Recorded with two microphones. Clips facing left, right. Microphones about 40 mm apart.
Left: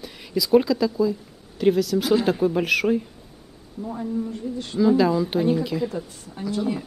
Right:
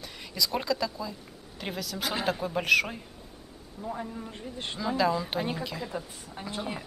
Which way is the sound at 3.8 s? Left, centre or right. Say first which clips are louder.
Left 4 dB; right.